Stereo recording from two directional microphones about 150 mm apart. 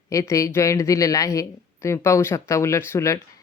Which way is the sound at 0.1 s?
20° left (ahead or behind).